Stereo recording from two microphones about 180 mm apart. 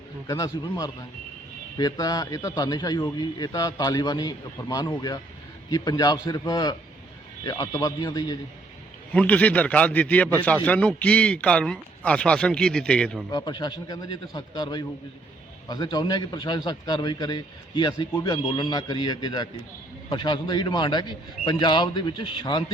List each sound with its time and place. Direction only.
0.3 s a man's voice: 20° left (ahead or behind)
9.1 s a man's voice: 10° left (ahead or behind)
13.3 s a man's voice: 25° left (ahead or behind)